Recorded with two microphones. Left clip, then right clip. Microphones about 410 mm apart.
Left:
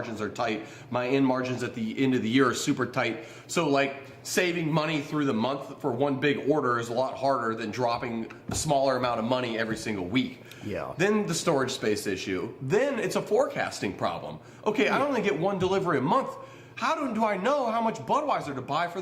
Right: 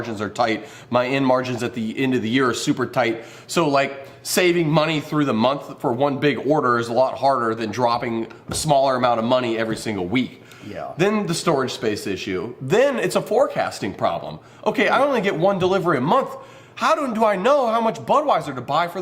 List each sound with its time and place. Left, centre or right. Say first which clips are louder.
0.0 s a man's voice: right 8 dB; right
3.5 s a man's voice: right 6 dB; right